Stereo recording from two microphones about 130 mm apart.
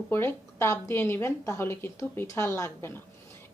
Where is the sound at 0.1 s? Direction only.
20° left (ahead or behind).